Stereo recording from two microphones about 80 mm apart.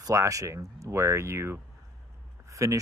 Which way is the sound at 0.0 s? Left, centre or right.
Right.